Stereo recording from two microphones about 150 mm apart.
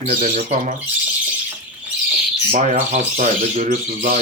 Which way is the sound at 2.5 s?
50° right (ahead or behind).